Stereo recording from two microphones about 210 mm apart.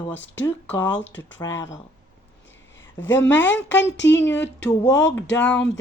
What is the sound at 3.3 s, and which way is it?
Speech, 10° left (ahead or behind).